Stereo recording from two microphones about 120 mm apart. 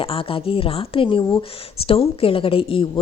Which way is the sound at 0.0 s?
50° left (ahead or behind).